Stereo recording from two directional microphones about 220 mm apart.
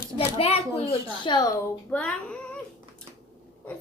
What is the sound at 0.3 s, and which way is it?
A child's voice, 25° left (ahead or behind).